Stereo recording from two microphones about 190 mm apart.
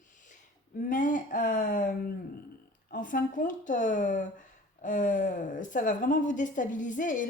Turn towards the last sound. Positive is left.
turn(degrees=45)  # may be behind; listen again after turning